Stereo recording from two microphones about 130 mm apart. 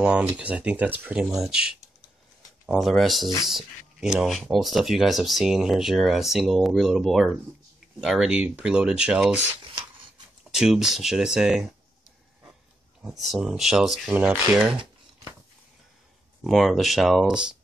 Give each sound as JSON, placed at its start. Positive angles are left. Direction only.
{"t": 0.0, "sound": "speech", "side_deg": -10}
{"t": 2.8, "sound": "speech", "side_deg": 0}
{"t": 10.5, "sound": "speech", "side_deg": -5}
{"t": 13.2, "sound": "speech", "side_deg": 0}
{"t": 16.4, "sound": "speech", "side_deg": 0}